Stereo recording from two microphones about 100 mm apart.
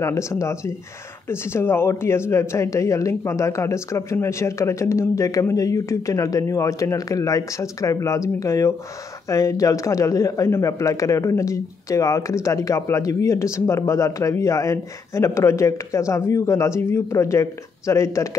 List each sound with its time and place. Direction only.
0.0 s speech: 30° left (ahead or behind)